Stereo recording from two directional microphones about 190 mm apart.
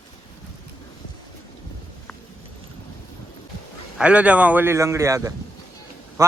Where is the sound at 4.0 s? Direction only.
5° right (ahead or behind).